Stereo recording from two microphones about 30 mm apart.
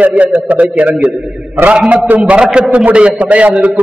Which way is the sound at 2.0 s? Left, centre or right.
Right.